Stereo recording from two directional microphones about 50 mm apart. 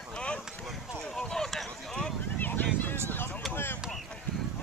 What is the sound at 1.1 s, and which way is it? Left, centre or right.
Run, centre.